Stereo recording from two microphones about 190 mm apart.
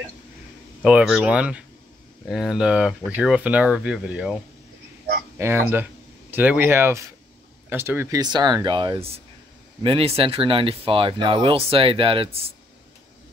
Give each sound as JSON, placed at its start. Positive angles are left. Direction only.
{"t": 0.8, "sound": "speech", "side_deg": -5}
{"t": 5.4, "sound": "speech", "side_deg": -15}